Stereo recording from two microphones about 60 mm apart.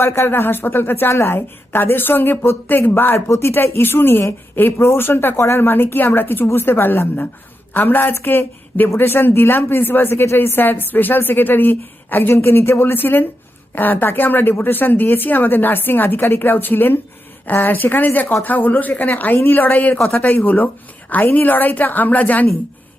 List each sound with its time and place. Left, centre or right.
0.3 s a woman's voice: left
3.2 s a woman's voice: left
20.1 s a woman's voice: left